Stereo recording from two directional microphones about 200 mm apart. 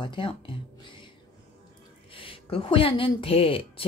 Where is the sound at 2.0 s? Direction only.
25° left (ahead or behind).